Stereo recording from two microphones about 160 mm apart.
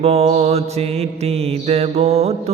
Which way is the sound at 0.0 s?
40° right (ahead or behind).